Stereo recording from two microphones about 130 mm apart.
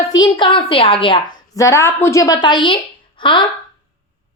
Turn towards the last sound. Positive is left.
turn(degrees=40)  # may be behind; listen again after turning